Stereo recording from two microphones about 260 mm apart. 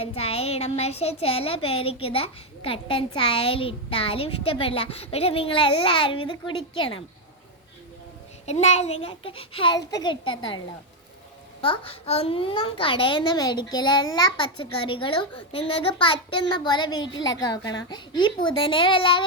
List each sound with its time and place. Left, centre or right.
0.0 s a child's voice: left
8.4 s a child's voice: left
11.6 s a child's voice: centre